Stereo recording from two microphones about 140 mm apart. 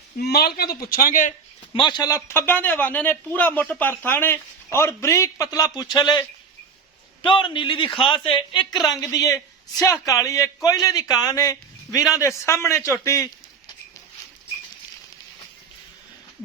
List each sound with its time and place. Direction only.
0.3 s a man's voice: 90° left
1.7 s a man's voice: 35° left (ahead or behind)